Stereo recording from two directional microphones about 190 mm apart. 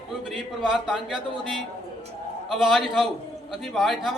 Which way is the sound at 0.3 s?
5° right (ahead or behind).